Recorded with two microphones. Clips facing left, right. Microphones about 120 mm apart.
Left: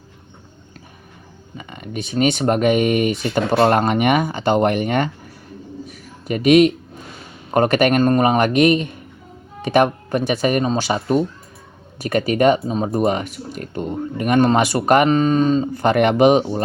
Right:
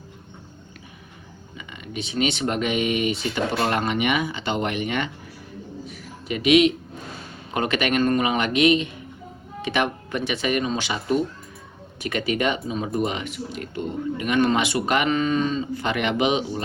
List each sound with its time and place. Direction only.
1.5 s speech: 45° left (ahead or behind)
5.8 s a sound: 45° left (ahead or behind)
7.5 s speech: 45° left (ahead or behind)